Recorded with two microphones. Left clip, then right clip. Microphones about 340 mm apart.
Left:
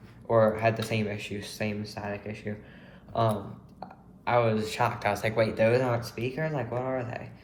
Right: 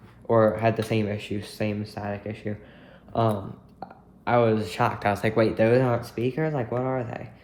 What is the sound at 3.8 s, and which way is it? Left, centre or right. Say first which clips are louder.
Speech: right 2 dB; right.